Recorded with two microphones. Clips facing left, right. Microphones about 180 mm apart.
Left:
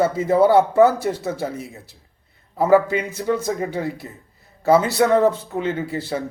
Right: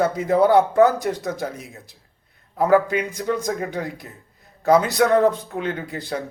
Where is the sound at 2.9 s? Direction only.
15° right (ahead or behind).